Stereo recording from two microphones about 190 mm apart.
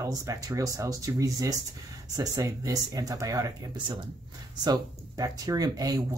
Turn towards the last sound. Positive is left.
turn(degrees=-20)  # may be behind; listen again after turning